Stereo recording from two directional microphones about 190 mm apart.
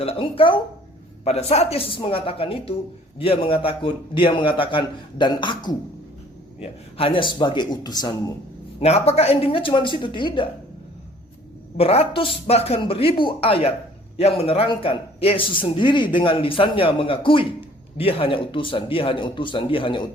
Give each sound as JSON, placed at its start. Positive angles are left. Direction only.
{"t": 0.0, "sound": "a man's voice", "side_deg": 30}
{"t": 8.8, "sound": "a man's voice", "side_deg": 35}
{"t": 11.8, "sound": "a man's voice", "side_deg": 30}